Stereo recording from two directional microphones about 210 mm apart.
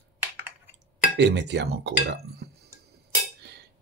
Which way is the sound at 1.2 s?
55° right (ahead or behind).